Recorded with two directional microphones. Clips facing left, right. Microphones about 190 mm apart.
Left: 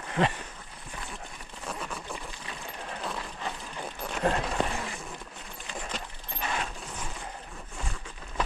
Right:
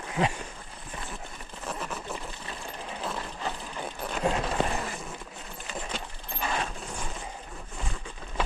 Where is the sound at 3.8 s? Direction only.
Centre (ahead or behind).